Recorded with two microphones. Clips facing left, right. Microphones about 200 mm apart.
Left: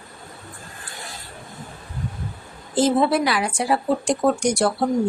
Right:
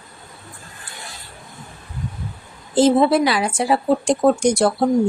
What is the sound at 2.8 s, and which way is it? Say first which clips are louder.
Speech: right 4 dB; 25° right (ahead or behind).